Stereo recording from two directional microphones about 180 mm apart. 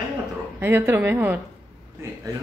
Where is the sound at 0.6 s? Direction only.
15° right (ahead or behind).